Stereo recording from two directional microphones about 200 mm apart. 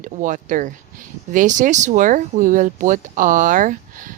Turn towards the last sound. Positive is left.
turn(degrees=-40)  # may be behind; listen again after turning